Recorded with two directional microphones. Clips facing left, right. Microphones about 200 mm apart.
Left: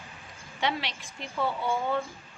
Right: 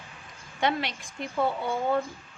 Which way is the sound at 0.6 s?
50° right (ahead or behind).